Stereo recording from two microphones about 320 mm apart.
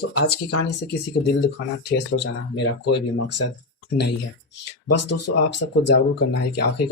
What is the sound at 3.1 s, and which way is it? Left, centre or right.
Speech, left.